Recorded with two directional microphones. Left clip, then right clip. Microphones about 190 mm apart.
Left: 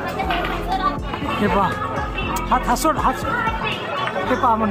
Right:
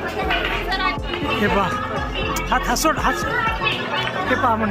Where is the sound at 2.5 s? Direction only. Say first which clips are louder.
Left 1 dB; 10° left (ahead or behind).